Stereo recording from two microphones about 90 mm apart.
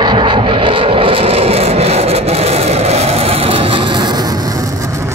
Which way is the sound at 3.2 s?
90° right.